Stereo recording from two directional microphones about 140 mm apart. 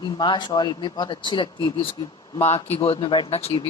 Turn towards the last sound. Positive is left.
turn(degrees=45)  # may be behind; listen again after turning